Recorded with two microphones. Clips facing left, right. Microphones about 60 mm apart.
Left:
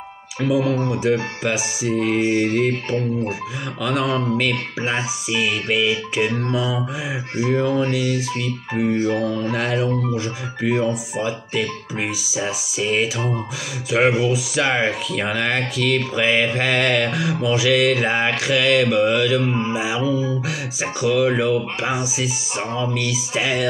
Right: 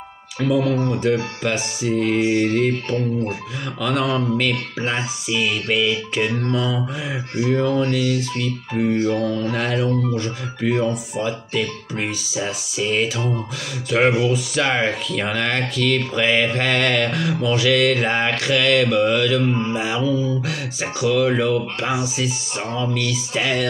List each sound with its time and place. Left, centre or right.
0.4 s speech: centre